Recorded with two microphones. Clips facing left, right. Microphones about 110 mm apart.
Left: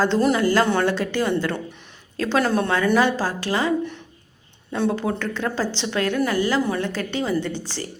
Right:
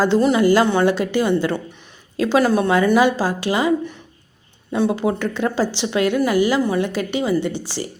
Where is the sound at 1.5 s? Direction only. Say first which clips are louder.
Right 3 dB; centre (ahead or behind).